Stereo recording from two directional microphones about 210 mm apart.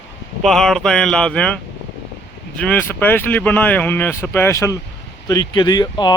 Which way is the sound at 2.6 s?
10° left (ahead or behind).